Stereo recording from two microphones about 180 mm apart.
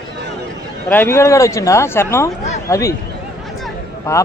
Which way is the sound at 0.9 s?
15° left (ahead or behind).